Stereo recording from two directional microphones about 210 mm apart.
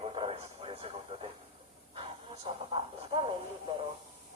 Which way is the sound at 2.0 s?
25° right (ahead or behind).